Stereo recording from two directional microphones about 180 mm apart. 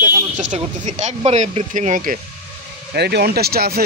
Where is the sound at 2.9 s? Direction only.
65° right (ahead or behind).